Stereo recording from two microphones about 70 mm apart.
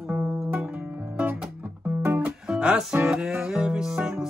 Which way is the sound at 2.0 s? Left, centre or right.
Right.